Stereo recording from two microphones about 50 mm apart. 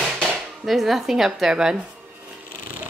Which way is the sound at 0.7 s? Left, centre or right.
Centre.